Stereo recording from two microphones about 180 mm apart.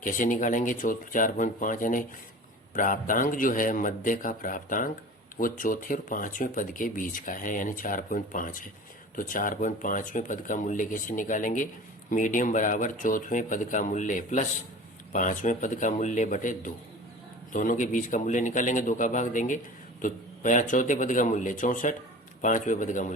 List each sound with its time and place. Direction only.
0.0 s speech: 45° left (ahead or behind)